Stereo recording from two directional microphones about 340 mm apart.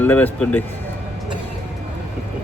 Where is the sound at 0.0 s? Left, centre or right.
Centre.